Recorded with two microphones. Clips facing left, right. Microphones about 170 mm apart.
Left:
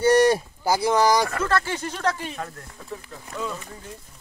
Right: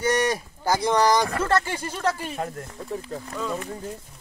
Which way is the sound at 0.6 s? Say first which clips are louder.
Even; 5° left (ahead or behind).